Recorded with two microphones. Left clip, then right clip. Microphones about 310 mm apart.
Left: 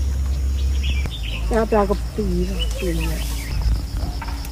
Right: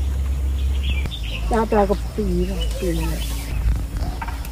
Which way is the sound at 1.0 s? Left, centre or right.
Centre.